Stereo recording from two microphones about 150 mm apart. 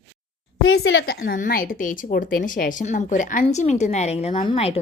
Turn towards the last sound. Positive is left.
turn(degrees=40)  # may be behind; listen again after turning